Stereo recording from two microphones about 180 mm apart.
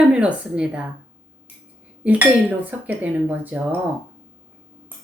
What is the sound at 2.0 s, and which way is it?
Speech, 10° right (ahead or behind).